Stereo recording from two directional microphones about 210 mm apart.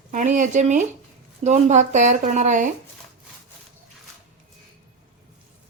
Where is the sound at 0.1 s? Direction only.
35° right (ahead or behind).